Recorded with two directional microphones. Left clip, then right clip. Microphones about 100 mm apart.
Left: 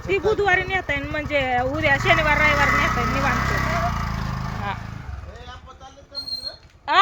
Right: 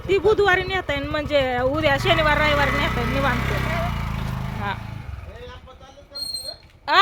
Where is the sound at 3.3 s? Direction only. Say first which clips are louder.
Left 2 dB; centre (ahead or behind).